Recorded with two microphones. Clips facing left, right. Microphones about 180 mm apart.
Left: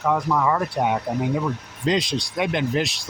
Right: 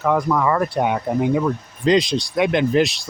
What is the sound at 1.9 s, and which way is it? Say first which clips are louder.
Speech: right 6 dB; 75° right (ahead or behind).